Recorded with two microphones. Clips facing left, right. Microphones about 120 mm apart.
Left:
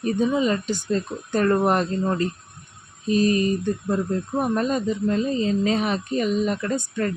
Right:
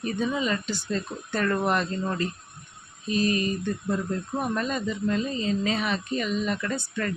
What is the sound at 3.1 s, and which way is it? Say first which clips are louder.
Speech: left 5 dB; 40° left (ahead or behind).